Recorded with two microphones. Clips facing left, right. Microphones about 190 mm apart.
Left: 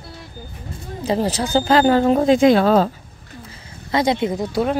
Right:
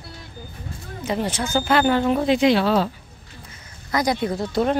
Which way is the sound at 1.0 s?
35° left (ahead or behind).